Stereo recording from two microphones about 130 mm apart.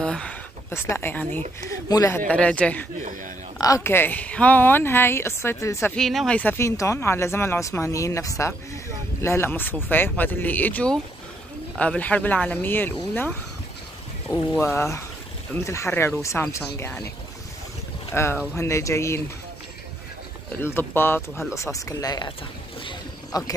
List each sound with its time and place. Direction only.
0.0 s a sound: 5° left (ahead or behind)
1.9 s speech: 25° left (ahead or behind)
3.5 s speech: 25° left (ahead or behind)
5.9 s speech: 5° left (ahead or behind)
14.6 s speech: 20° left (ahead or behind)
18.1 s speech: 20° left (ahead or behind)
20.6 s speech: 15° left (ahead or behind)
21.7 s speech: 25° left (ahead or behind)
22.8 s a sound: 35° left (ahead or behind)